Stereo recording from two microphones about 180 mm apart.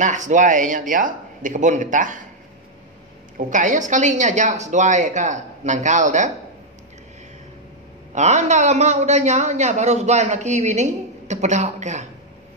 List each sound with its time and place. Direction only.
0.0 s a woman's voice: 45° right (ahead or behind)
3.3 s a woman's voice: 45° right (ahead or behind)
8.1 s a man's voice: 40° right (ahead or behind)